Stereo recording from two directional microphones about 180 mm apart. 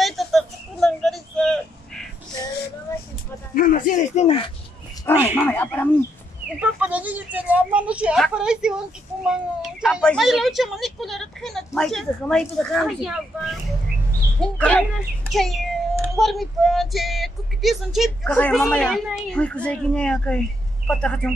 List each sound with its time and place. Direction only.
0.0 s a sound: centre (ahead or behind)
3.5 s speech: 50° left (ahead or behind)
5.1 s a sound: 15° left (ahead or behind)
5.5 s speech: 10° left (ahead or behind)
6.6 s speech: 10° right (ahead or behind)
9.3 s child singing: 5° right (ahead or behind)
20.8 s speech: 5° left (ahead or behind)